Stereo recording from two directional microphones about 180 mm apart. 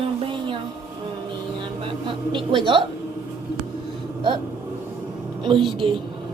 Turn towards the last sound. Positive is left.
turn(degrees=-30)  # may be behind; listen again after turning